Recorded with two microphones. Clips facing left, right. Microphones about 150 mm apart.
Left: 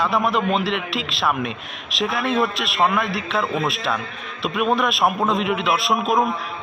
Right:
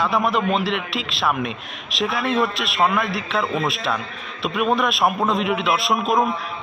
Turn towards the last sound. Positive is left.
turn(degrees=0)  # may be behind; listen again after turning